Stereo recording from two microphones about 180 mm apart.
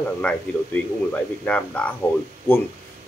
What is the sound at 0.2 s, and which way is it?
Speech, 5° left (ahead or behind).